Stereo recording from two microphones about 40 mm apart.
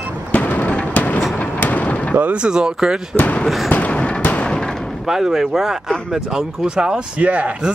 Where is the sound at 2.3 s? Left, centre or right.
Centre.